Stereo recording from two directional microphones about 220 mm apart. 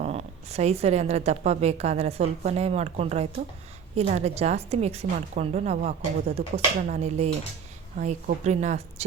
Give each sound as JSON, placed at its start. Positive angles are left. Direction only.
{"t": 0.0, "sound": "a woman's voice", "side_deg": -30}